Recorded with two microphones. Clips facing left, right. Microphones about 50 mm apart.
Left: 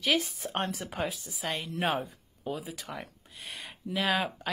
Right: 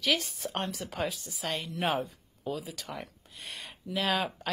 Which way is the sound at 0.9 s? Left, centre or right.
Centre.